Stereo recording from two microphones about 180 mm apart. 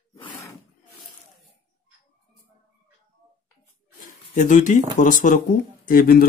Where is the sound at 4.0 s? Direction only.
45° left (ahead or behind).